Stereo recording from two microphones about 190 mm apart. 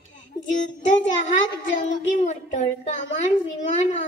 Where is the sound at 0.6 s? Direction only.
40° left (ahead or behind).